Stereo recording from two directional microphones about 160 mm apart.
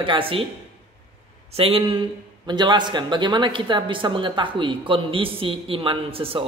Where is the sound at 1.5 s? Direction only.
35° right (ahead or behind).